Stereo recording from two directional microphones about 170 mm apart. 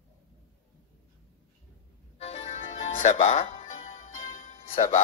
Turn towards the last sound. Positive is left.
turn(degrees=40)  # may be behind; listen again after turning